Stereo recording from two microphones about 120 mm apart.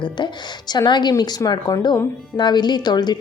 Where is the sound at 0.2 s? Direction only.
40° left (ahead or behind).